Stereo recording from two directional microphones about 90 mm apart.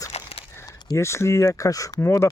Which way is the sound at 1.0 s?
30° left (ahead or behind).